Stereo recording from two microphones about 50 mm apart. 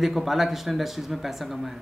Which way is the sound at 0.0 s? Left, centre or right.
Centre.